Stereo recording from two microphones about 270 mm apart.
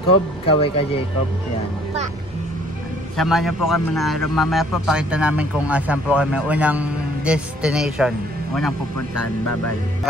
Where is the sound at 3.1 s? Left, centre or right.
Centre.